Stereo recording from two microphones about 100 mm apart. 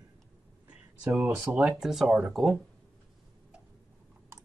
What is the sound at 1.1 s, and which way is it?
Speech, 20° right (ahead or behind).